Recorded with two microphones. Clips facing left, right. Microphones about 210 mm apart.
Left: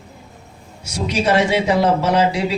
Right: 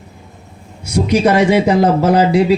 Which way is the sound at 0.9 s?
55° right (ahead or behind).